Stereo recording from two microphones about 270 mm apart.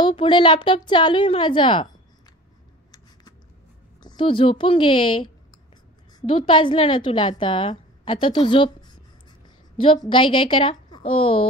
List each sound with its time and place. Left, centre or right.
0.0 s a woman's voice: centre
4.0 s a woman's voice: centre